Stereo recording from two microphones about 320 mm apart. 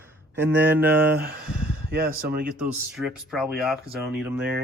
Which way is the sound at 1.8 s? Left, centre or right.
Right.